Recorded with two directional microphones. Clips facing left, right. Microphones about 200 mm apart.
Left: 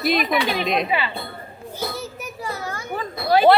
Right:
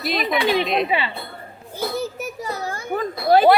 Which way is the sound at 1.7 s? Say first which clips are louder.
Right 5 dB; 45° right (ahead or behind).